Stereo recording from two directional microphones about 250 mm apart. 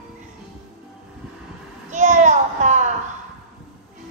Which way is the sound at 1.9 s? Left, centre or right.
Right.